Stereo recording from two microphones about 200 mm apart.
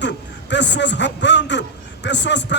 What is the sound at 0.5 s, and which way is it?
A man's voice, 60° left (ahead or behind).